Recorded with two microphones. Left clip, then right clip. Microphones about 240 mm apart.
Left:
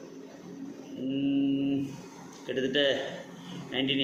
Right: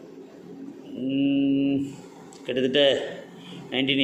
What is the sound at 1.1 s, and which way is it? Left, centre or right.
Mantra, right.